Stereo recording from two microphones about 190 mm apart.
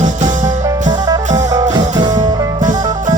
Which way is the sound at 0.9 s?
20° right (ahead or behind).